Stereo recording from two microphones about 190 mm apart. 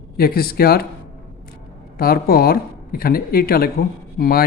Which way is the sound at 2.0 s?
50° left (ahead or behind).